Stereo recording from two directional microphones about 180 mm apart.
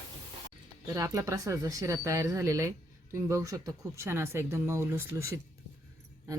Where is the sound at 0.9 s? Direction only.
15° right (ahead or behind).